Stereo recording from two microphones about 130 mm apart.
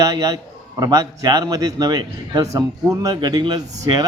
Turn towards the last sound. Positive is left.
turn(degrees=-30)  # may be behind; listen again after turning